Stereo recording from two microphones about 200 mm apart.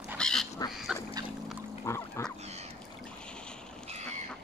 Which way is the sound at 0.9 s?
5° right (ahead or behind).